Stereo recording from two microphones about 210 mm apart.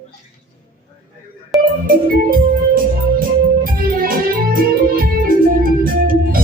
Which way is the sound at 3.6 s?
45° right (ahead or behind).